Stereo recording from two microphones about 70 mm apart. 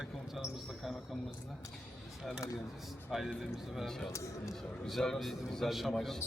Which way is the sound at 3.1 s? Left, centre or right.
Centre.